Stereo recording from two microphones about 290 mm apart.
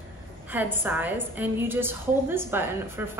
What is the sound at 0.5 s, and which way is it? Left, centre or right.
A woman's voice, centre.